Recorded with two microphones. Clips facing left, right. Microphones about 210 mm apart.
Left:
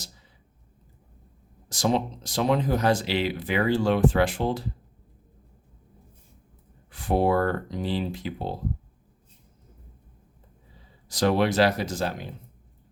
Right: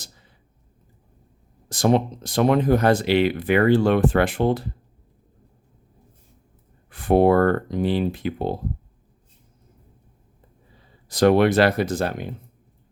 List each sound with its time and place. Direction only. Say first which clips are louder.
1.7 s speech: right 5 dB; 55° right (ahead or behind)
6.9 s speech: right 6 dB; 55° right (ahead or behind)
11.1 s speech: right 6 dB; 60° right (ahead or behind)